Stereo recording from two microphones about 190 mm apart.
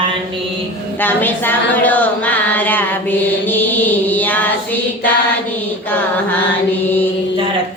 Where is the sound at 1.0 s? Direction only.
10° left (ahead or behind).